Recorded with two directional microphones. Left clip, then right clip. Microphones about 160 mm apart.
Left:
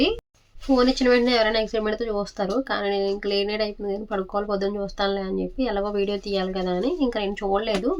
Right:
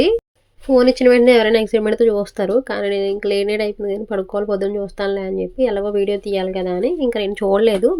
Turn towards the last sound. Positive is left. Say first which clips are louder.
# right 9 dB
turn(degrees=-40)  # may be behind; listen again after turning